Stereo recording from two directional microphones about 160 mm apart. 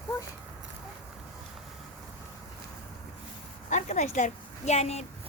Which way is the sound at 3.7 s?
50° left (ahead or behind).